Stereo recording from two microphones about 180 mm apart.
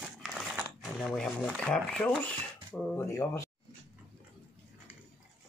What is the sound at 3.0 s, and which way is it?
Speech, 15° left (ahead or behind).